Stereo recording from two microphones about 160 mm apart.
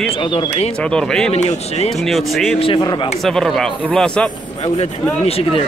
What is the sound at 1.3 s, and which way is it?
Speech, 40° left (ahead or behind).